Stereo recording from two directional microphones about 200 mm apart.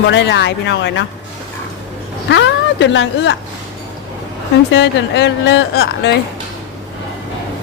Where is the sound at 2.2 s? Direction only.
65° left (ahead or behind).